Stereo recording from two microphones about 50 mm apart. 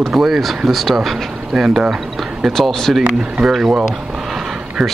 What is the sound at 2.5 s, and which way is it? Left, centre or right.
Speech, centre.